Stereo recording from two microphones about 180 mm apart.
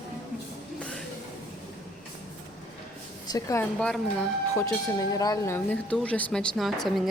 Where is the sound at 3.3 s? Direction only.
20° left (ahead or behind).